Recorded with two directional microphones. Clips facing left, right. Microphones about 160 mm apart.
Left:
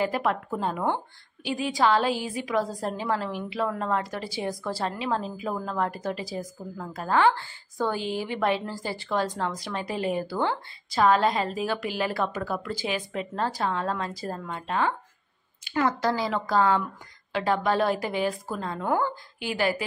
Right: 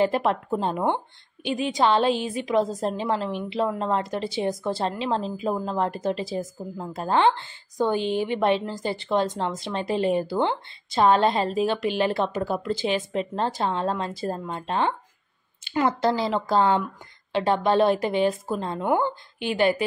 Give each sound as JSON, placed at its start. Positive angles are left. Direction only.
{"t": 0.0, "sound": "a woman's voice", "side_deg": -30}